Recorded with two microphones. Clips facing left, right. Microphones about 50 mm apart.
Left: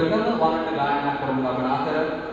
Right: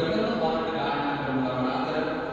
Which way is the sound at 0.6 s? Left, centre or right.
Centre.